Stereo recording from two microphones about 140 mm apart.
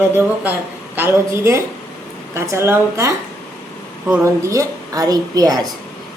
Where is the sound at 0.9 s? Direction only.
20° right (ahead or behind).